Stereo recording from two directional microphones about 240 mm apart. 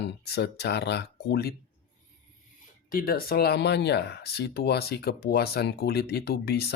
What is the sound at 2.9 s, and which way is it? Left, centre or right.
Speech, left.